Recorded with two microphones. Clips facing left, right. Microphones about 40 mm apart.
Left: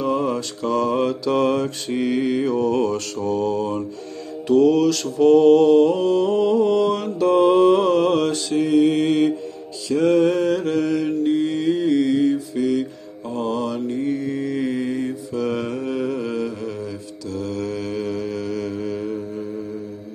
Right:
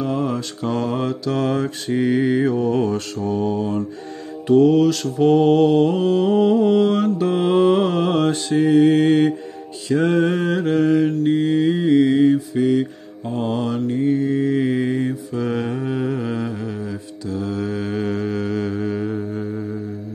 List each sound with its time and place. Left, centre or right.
0.0 s mantra: centre
0.9 s mantra: centre
8.4 s mantra: right
17.9 s mantra: right
19.0 s music: right